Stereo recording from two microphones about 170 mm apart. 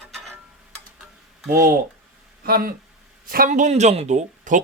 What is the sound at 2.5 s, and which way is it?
Speech, 60° right (ahead or behind).